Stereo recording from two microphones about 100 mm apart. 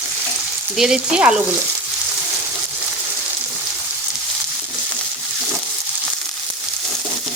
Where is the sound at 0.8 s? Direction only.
10° right (ahead or behind).